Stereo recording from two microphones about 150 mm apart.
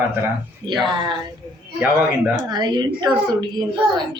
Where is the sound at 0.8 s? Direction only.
30° right (ahead or behind).